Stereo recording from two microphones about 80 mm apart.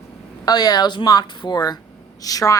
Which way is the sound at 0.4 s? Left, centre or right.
Left.